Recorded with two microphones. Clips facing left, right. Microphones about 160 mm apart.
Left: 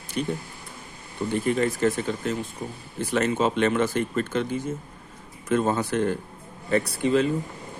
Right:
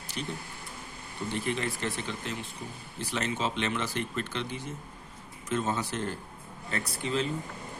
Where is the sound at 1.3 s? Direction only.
45° left (ahead or behind).